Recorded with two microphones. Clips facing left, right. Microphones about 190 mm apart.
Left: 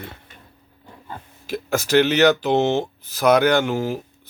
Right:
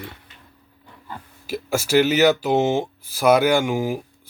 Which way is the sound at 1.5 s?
5° right (ahead or behind).